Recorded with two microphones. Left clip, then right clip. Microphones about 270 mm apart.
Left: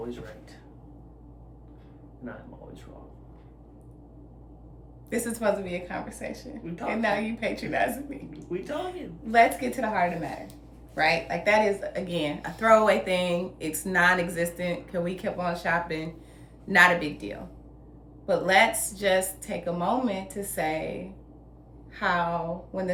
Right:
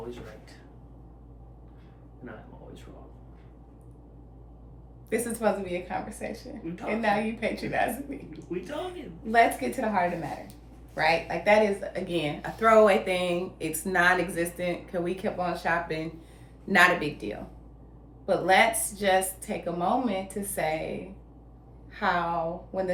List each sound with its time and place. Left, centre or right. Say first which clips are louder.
5.0 s a woman's voice: even; centre
9.2 s a woman's voice: left 1 dB; centre
21.9 s a woman's voice: even; centre